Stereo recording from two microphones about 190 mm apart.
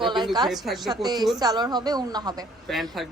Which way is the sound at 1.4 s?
20° right (ahead or behind).